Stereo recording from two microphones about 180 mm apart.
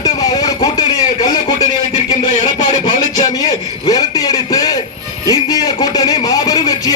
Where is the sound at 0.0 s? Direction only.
20° left (ahead or behind).